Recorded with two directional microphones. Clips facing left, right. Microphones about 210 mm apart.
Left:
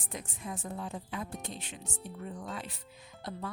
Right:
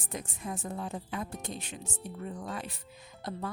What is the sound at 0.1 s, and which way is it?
A woman's voice, 45° right (ahead or behind).